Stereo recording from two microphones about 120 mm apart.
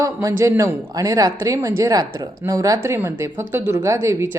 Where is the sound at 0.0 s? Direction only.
25° right (ahead or behind).